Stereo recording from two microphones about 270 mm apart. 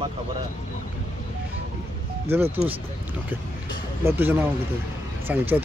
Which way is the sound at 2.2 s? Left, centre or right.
Centre.